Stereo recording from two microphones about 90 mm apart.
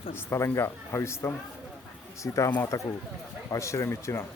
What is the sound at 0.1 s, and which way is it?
Speech, 25° left (ahead or behind).